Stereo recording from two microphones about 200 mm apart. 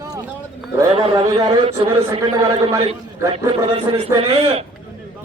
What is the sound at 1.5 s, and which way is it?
Speech, 30° right (ahead or behind).